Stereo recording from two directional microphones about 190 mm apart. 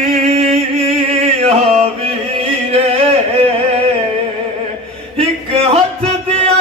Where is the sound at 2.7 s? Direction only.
30° right (ahead or behind).